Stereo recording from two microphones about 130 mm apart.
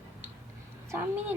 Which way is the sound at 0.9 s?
15° right (ahead or behind).